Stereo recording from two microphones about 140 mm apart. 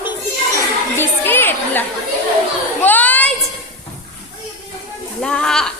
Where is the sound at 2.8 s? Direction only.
10° left (ahead or behind).